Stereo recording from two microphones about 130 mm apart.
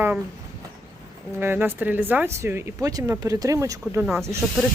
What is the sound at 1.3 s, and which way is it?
Speech, 15° right (ahead or behind).